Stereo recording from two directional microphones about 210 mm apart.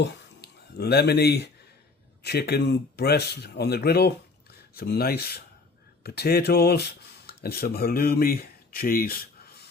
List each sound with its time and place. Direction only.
0.0 s speech: 50° left (ahead or behind)